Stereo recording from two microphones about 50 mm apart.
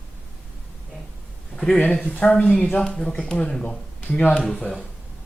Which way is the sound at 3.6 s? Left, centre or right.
Left.